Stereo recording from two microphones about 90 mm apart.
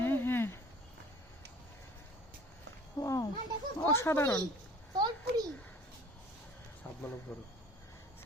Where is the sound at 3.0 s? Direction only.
40° left (ahead or behind).